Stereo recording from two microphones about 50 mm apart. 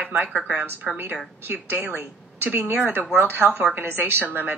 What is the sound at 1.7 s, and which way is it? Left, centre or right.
A woman's voice, right.